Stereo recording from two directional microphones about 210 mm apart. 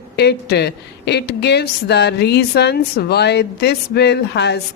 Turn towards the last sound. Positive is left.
turn(degrees=55)  # may be behind; listen again after turning